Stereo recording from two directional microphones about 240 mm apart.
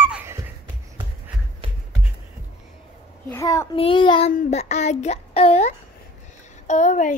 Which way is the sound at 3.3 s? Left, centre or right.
Centre.